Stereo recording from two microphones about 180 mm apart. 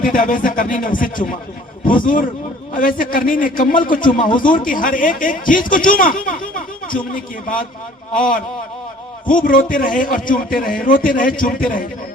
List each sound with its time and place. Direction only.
0.0 s a man's voice: 50° left (ahead or behind)
2.7 s a man's voice: 50° left (ahead or behind)
6.4 s a sound: 50° left (ahead or behind)
6.9 s a man's voice: 50° left (ahead or behind)